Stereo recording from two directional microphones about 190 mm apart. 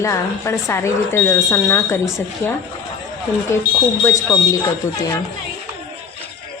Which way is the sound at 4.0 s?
15° left (ahead or behind).